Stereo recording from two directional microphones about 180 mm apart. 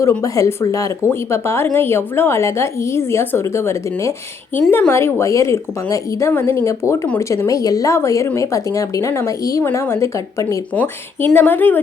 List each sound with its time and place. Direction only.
0.2 s a woman's voice: 20° left (ahead or behind)